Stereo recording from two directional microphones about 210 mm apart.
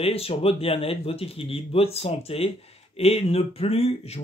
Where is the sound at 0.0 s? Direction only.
30° left (ahead or behind).